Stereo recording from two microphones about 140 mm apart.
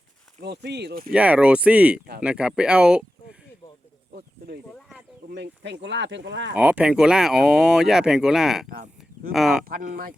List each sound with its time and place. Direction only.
1.1 s speech: 10° right (ahead or behind)
6.5 s speech: 10° right (ahead or behind)
8.7 s a sound: 90° right
9.3 s speech: centre (ahead or behind)
9.6 s speech: 90° right